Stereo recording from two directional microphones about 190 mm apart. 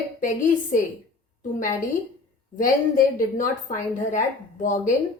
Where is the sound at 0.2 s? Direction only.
45° left (ahead or behind).